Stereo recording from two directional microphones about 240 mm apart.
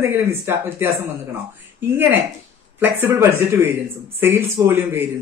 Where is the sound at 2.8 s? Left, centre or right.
Centre.